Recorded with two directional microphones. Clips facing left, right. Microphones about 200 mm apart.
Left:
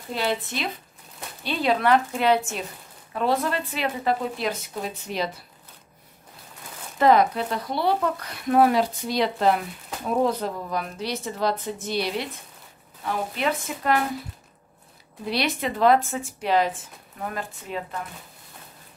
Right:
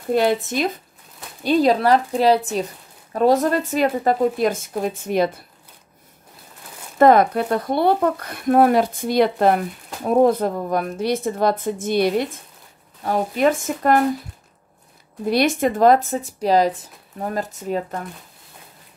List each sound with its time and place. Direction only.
0.1 s speech: 50° right (ahead or behind)
7.0 s speech: 50° right (ahead or behind)
15.2 s speech: 50° right (ahead or behind)